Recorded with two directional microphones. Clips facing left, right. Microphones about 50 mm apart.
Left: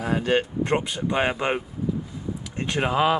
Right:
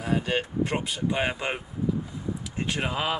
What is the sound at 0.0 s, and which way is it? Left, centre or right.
Speech, left.